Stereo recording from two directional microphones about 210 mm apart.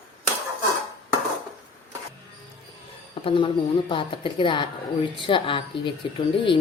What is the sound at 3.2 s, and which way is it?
Speech, 25° left (ahead or behind).